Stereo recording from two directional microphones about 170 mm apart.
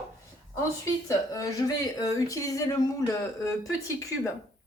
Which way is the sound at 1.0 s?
20° left (ahead or behind).